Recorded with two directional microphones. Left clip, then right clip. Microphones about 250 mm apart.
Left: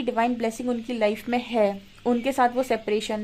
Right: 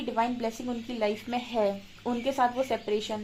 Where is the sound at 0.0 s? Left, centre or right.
Left.